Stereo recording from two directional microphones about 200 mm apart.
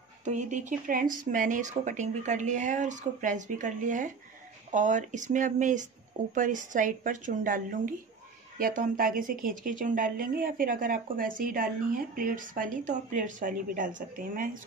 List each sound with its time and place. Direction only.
0.2 s speech: 35° right (ahead or behind)